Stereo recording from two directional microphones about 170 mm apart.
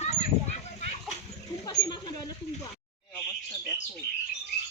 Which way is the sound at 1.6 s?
25° left (ahead or behind).